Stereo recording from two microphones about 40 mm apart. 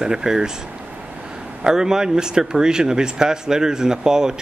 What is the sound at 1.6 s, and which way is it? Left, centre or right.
Speech, centre.